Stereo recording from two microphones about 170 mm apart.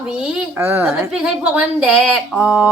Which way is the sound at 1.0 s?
5° right (ahead or behind).